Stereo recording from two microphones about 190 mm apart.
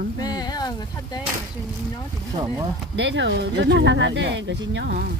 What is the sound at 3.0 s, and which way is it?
Speech, 75° right (ahead or behind).